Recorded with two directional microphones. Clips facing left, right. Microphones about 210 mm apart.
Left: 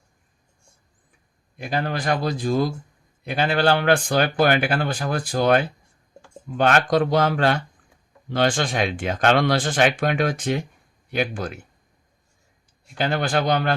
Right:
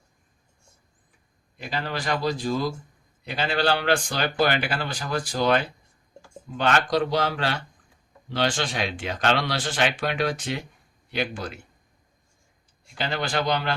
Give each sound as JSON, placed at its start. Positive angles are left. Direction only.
{"t": 1.5, "sound": "speech", "side_deg": 50}
{"t": 13.0, "sound": "speech", "side_deg": 50}